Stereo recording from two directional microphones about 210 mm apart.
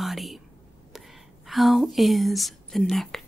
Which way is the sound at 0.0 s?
Centre (ahead or behind).